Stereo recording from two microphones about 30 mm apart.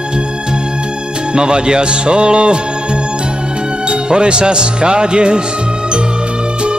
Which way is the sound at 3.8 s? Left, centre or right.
Right.